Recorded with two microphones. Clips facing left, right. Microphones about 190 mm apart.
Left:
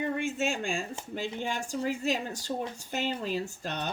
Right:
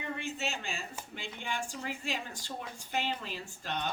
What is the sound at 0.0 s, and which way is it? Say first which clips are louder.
Speech: left 7 dB; 50° left (ahead or behind).